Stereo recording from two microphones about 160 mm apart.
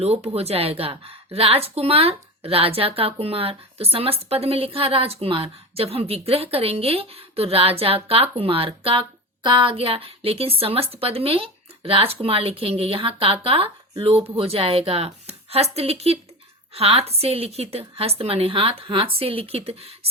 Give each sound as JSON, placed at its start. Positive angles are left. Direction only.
{"t": 0.0, "sound": "a woman's voice", "side_deg": -40}